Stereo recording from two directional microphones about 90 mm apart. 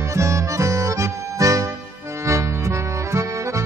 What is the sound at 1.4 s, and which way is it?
Music, 40° right (ahead or behind).